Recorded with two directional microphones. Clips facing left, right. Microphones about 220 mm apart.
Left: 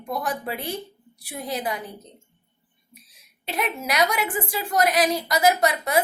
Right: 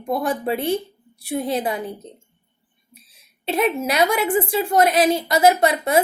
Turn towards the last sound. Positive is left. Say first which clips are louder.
# right 4 dB
turn(degrees=-25)  # may be behind; listen again after turning